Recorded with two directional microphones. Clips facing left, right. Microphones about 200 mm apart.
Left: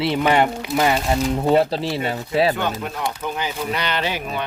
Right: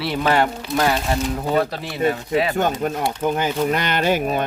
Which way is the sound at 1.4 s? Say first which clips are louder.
Left 4 dB; 30° left (ahead or behind).